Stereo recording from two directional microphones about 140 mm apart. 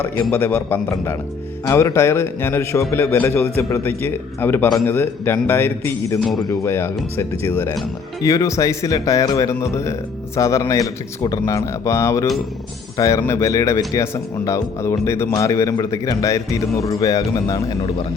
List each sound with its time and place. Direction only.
0.2 s a man's voice: 15° left (ahead or behind)